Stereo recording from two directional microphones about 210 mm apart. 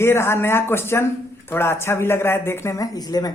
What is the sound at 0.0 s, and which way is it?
Speech, 10° left (ahead or behind).